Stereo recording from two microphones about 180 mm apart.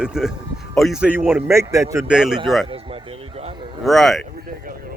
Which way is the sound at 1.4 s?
15° right (ahead or behind).